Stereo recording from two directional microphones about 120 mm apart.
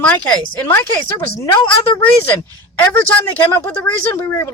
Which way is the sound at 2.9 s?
15° left (ahead or behind).